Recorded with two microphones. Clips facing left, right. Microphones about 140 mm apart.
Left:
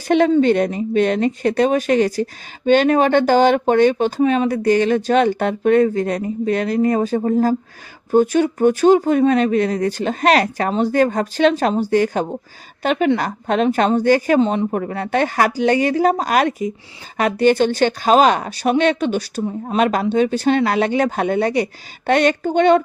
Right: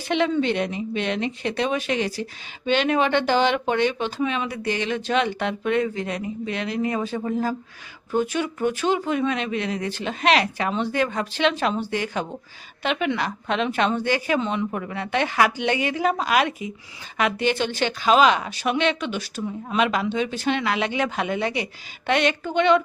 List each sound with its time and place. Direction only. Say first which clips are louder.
0.1 s a woman's voice: left 8 dB; 45° left (ahead or behind)